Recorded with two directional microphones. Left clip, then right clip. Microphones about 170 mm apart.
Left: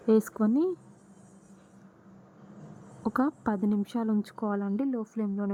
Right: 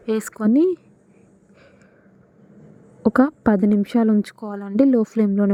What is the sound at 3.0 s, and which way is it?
A woman's voice, 20° right (ahead or behind).